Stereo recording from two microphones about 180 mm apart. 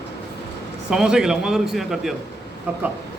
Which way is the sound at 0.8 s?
5° right (ahead or behind).